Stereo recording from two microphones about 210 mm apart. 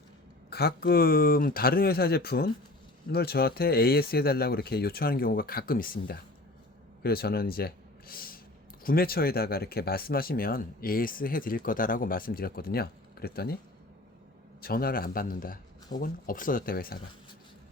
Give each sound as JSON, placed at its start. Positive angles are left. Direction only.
{"t": 0.5, "sound": "speech", "side_deg": 45}
{"t": 14.6, "sound": "speech", "side_deg": 45}